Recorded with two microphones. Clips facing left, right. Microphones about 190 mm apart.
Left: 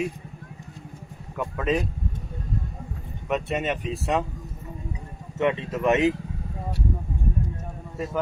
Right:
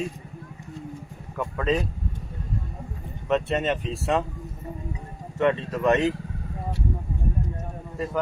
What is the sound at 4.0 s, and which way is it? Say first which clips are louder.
Speech: right 1 dB; centre (ahead or behind).